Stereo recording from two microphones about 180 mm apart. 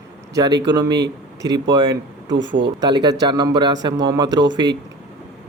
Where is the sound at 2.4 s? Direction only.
85° right.